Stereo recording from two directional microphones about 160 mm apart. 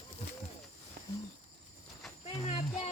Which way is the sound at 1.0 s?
65° right (ahead or behind).